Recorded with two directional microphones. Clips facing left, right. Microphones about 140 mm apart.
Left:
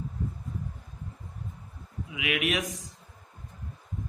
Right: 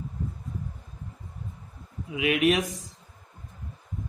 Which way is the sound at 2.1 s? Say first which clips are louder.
Right 7 dB; 35° right (ahead or behind).